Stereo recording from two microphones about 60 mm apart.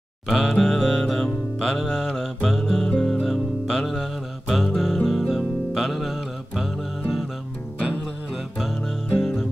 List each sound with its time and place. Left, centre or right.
0.3 s music: centre
0.7 s music: centre
9.1 s music: centre